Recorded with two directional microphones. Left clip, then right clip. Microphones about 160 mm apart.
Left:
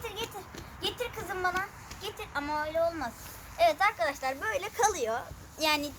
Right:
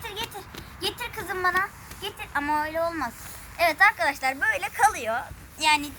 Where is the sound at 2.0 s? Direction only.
15° left (ahead or behind); by 5.2 s 30° left (ahead or behind).